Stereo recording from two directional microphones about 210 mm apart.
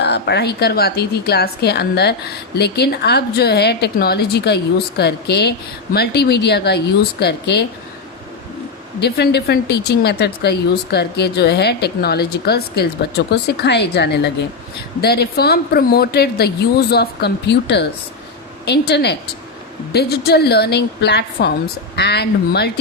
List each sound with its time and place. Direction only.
0.0 s a woman's voice: 55° left (ahead or behind)
9.0 s a woman's voice: 50° left (ahead or behind)